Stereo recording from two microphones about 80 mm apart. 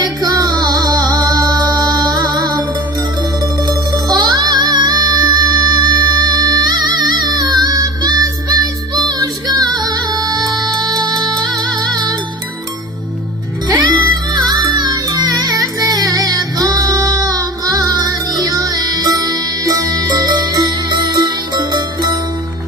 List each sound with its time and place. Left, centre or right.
0.2 s music: right
3.7 s music: right
13.7 s music: right
14.3 s music: right